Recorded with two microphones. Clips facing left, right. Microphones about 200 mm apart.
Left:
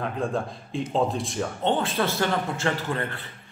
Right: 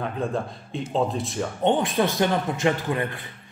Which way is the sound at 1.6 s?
15° right (ahead or behind).